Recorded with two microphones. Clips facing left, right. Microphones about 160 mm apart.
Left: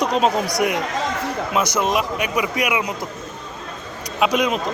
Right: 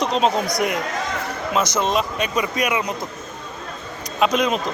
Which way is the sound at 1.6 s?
10° left (ahead or behind).